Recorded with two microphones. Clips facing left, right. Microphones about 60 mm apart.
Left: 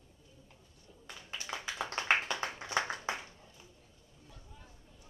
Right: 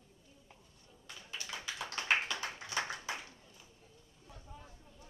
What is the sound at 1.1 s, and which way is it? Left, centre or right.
Clapping, left.